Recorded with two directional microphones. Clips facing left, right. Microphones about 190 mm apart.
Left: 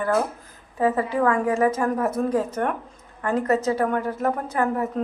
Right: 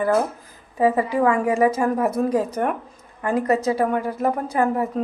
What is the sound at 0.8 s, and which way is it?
A woman's voice, 10° right (ahead or behind).